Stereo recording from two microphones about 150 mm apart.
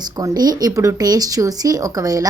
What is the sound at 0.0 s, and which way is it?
Speech, 25° right (ahead or behind).